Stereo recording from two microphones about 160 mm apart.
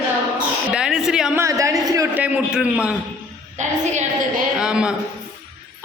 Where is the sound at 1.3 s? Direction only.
20° right (ahead or behind).